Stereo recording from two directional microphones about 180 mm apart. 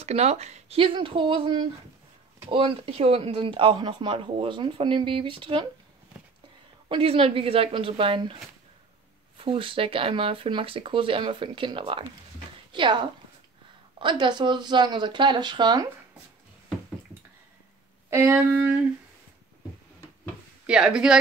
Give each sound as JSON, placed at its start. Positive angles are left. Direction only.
{"t": 0.0, "sound": "speech", "side_deg": -35}
{"t": 6.9, "sound": "speech", "side_deg": -30}
{"t": 9.4, "sound": "speech", "side_deg": -30}
{"t": 13.9, "sound": "speech", "side_deg": -25}
{"t": 18.1, "sound": "speech", "side_deg": -15}
{"t": 20.6, "sound": "speech", "side_deg": -5}